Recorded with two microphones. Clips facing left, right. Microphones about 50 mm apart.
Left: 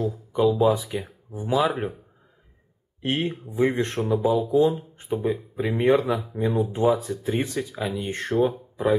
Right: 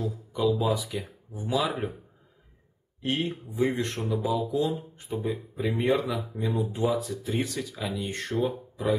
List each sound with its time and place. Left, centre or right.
0.0 s speech: left
3.0 s speech: left